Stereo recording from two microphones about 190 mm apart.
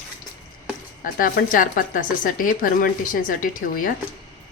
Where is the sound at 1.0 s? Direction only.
45° left (ahead or behind).